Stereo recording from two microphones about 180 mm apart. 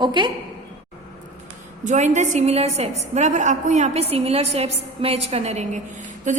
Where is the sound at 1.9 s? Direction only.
40° right (ahead or behind).